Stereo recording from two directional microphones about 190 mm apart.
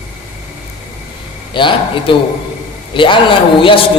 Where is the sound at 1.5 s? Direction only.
25° left (ahead or behind).